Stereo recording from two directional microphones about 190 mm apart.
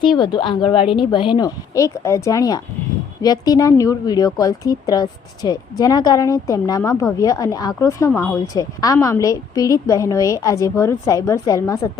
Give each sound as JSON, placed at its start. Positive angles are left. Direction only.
{"t": 0.0, "sound": "a woman's voice", "side_deg": 25}